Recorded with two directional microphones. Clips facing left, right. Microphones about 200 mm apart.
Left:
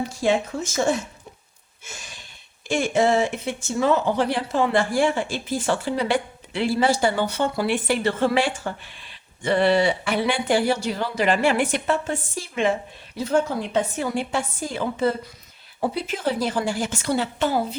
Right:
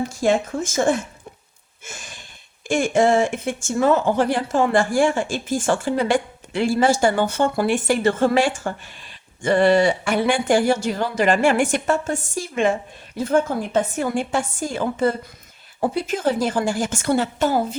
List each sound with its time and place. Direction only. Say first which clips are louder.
0.1 s speech: right 2 dB; 45° right (ahead or behind)
1.8 s a sound: right 3 dB; 50° right (ahead or behind)
2.6 s speech: right 3 dB; 50° right (ahead or behind)